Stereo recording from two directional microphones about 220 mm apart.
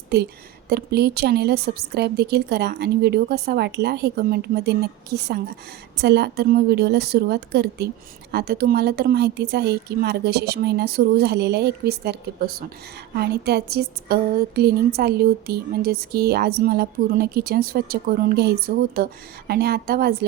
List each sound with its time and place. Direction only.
0.1 s a woman's voice: 45° right (ahead or behind)